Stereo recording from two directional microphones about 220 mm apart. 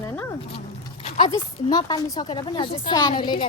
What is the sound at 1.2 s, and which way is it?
A woman's voice, 20° left (ahead or behind).